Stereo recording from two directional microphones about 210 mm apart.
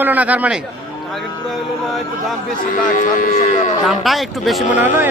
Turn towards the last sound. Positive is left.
turn(degrees=-10)  # may be behind; listen again after turning